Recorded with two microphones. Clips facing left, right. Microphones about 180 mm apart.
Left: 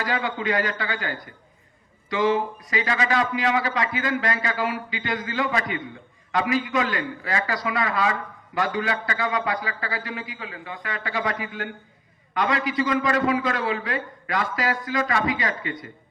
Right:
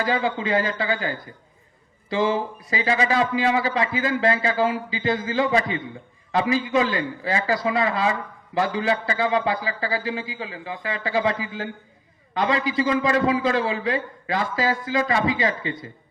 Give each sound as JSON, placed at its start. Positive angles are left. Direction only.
{"t": 0.0, "sound": "a man's voice", "side_deg": -25}